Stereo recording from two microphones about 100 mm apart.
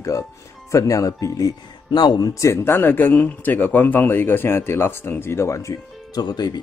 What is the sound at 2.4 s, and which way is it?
Speech, 25° left (ahead or behind).